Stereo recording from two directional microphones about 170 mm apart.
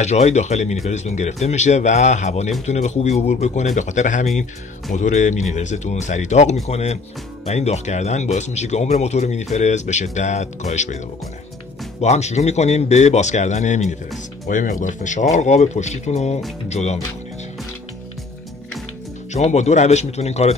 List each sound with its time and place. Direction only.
0.0 s speech: 40° left (ahead or behind)
12.0 s speech: 40° left (ahead or behind)
19.3 s speech: 40° left (ahead or behind)